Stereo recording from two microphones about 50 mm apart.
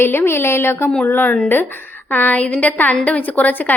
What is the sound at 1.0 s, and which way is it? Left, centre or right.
A woman's voice, left.